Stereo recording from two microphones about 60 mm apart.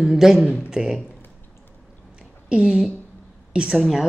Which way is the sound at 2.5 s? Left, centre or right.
Centre.